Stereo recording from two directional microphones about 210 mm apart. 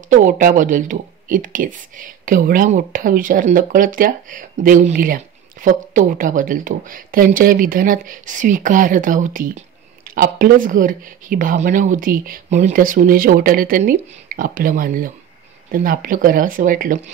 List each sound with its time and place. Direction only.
0.1 s speech: 40° right (ahead or behind)